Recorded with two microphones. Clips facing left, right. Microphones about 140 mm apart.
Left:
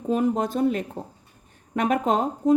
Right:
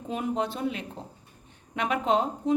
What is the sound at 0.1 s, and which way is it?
A woman's voice, 45° left (ahead or behind).